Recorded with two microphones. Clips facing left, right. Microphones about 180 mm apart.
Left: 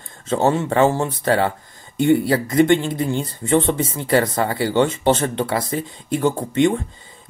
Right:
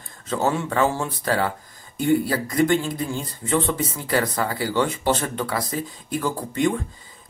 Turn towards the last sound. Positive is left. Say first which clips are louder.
# left 5 dB
turn(degrees=25)  # may be behind; listen again after turning